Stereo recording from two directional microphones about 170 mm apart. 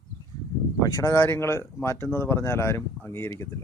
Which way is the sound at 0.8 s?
20° left (ahead or behind).